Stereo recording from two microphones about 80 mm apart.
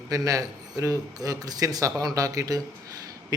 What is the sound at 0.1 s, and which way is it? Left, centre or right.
Speech, right.